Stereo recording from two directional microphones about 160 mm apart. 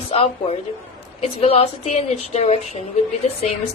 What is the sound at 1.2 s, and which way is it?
A woman's voice, 35° left (ahead or behind).